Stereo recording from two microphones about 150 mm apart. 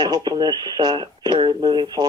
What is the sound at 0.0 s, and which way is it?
Speech, 30° right (ahead or behind).